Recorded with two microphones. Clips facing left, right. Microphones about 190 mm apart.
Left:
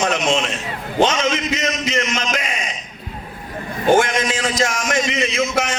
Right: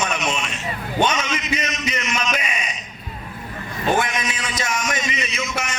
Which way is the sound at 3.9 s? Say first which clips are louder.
Left 6 dB; 90° left.